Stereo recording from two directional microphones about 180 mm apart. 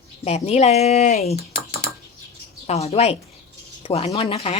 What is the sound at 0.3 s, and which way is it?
A woman's voice, 35° left (ahead or behind).